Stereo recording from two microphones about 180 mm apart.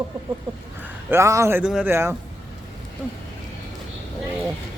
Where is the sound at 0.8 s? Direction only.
10° right (ahead or behind).